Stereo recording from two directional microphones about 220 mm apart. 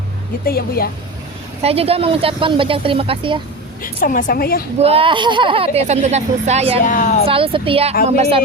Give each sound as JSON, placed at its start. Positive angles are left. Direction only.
{"t": 0.4, "sound": "speech", "side_deg": 45}
{"t": 1.6, "sound": "speech", "side_deg": -25}
{"t": 3.8, "sound": "a woman's voice", "side_deg": 40}
{"t": 4.8, "sound": "speech", "side_deg": -25}
{"t": 6.8, "sound": "a woman's voice", "side_deg": 40}
{"t": 7.3, "sound": "speech", "side_deg": -25}